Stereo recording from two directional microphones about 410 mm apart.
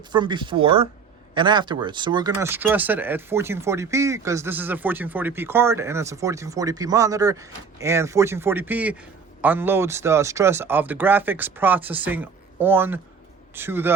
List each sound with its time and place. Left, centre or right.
0.1 s speech: centre